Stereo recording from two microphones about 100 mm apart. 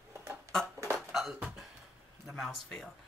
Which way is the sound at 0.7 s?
30° right (ahead or behind).